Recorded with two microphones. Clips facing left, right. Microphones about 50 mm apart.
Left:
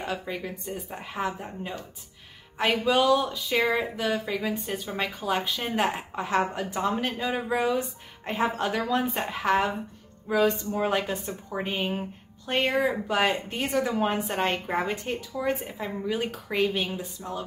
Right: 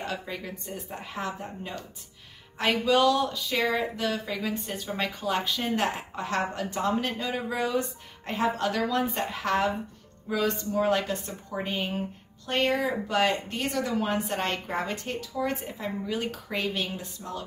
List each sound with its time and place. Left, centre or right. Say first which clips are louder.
0.0 s speech: left 2 dB; centre